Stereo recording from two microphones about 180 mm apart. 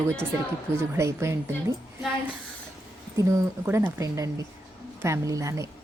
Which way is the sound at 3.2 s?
15° right (ahead or behind).